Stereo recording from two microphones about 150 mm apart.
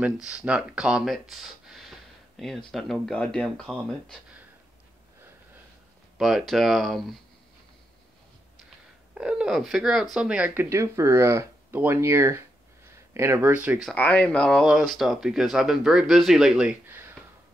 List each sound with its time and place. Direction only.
0.0 s speech: 5° right (ahead or behind)
6.1 s speech: centre (ahead or behind)
8.6 s a sound: 5° right (ahead or behind)
10.1 s speech: 5° right (ahead or behind)
13.8 s speech: 10° left (ahead or behind); by 17.2 s 15° right (ahead or behind)